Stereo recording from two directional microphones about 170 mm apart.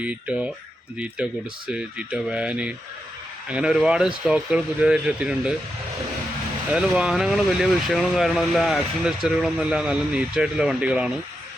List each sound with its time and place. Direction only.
0.0 s speech: 5° right (ahead or behind)
6.7 s speech: 5° right (ahead or behind)